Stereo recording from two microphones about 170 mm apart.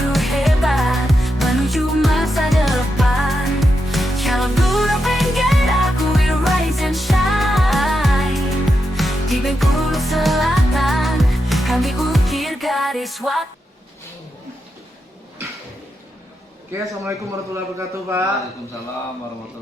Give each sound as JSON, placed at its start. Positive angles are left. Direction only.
{"t": 0.1, "sound": "music", "side_deg": 0}
{"t": 16.7, "sound": "a man's voice", "side_deg": -15}